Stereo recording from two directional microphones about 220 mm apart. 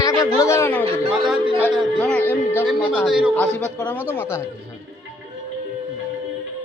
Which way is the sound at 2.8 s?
10° left (ahead or behind).